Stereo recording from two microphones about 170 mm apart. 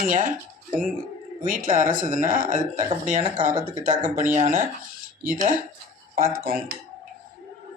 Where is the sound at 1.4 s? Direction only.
50° right (ahead or behind).